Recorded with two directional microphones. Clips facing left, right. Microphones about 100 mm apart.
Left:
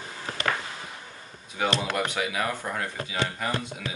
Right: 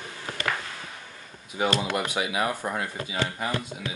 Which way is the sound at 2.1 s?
20° right (ahead or behind).